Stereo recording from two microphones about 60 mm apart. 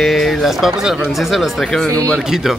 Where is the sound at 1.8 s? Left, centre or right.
Left.